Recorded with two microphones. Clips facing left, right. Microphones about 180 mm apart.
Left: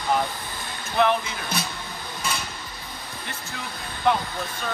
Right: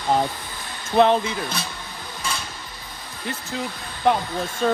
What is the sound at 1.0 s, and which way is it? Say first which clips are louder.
Speech: right 5 dB; 25° right (ahead or behind).